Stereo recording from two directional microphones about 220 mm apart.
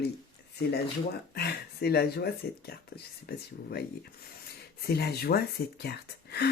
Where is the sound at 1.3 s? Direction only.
45° left (ahead or behind).